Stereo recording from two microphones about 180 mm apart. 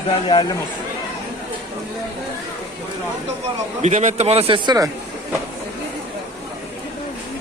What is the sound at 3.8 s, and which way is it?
A man's voice, 40° right (ahead or behind).